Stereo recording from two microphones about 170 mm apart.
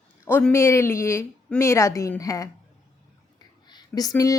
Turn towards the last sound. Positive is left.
turn(degrees=20)  # may be behind; listen again after turning